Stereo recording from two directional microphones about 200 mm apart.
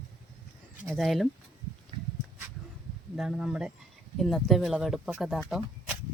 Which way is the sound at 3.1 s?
Centre (ahead or behind).